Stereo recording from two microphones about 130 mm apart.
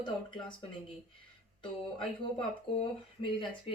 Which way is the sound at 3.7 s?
50° left (ahead or behind).